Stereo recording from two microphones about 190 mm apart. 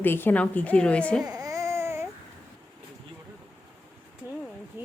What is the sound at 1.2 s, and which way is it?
Baby cry, 20° right (ahead or behind).